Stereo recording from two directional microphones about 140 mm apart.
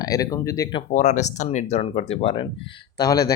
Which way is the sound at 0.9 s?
55° left (ahead or behind).